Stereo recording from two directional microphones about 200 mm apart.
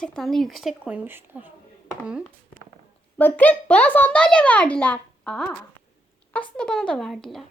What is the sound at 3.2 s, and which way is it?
A child's voice, 10° left (ahead or behind).